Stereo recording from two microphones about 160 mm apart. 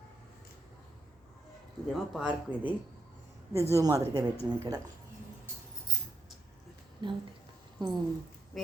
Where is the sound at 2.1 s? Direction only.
10° right (ahead or behind).